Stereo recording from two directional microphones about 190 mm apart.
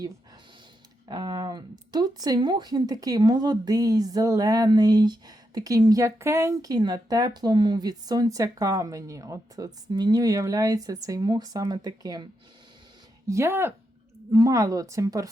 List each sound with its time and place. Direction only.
1.0 s speech: 20° right (ahead or behind)